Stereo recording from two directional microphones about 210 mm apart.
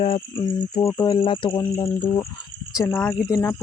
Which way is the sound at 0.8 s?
15° left (ahead or behind).